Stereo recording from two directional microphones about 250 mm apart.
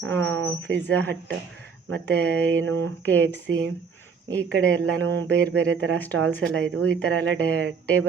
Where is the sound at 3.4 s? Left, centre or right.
Right.